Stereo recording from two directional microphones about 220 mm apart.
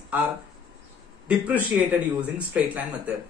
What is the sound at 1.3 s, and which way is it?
A man's voice, 5° right (ahead or behind).